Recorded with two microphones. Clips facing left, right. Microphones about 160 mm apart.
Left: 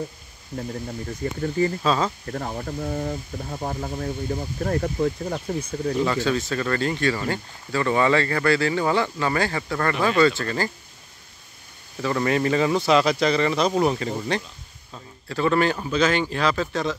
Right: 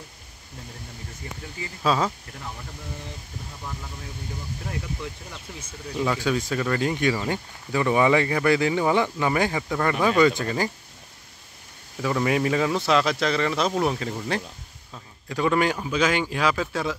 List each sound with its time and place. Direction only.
1.2 s speech: 45° left (ahead or behind)
1.8 s speech: 5° right (ahead or behind)
2.2 s speech: 55° left (ahead or behind)
6.0 s speech: 10° right (ahead or behind)
12.0 s speech: 5° right (ahead or behind)